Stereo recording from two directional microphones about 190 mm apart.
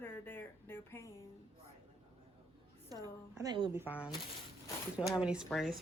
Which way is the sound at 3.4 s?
20° right (ahead or behind).